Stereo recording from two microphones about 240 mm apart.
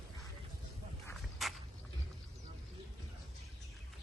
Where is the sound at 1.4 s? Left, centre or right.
Centre.